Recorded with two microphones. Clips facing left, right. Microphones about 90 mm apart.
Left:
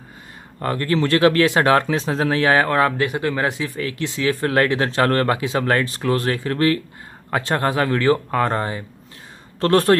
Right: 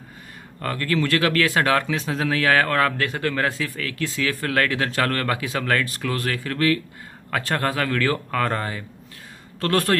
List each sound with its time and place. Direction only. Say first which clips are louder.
0.6 s speech: left 3 dB; 25° left (ahead or behind)